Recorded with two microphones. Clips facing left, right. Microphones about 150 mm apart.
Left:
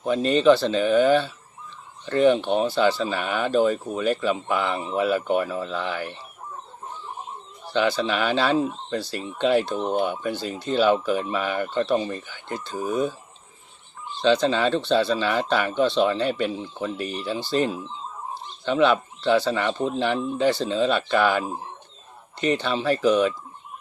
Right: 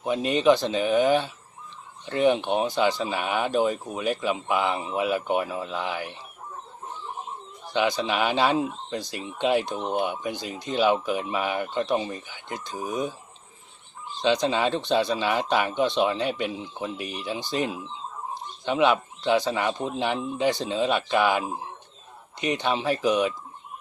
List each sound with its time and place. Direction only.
0.0 s speech: 15° right (ahead or behind)
7.7 s speech: 15° right (ahead or behind)
14.2 s speech: 15° right (ahead or behind)